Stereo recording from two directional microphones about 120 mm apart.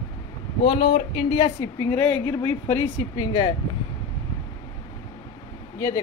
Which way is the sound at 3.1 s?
35° left (ahead or behind).